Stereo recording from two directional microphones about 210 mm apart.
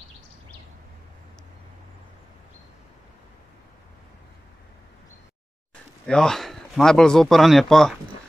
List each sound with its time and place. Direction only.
6.0 s speech: 5° left (ahead or behind)